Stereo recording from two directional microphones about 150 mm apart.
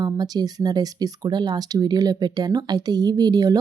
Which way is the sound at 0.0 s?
25° right (ahead or behind).